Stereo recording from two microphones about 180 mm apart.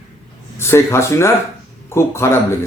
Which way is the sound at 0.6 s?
15° left (ahead or behind).